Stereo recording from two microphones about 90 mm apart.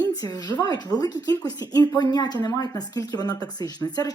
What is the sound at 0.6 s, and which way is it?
Speech, 50° left (ahead or behind).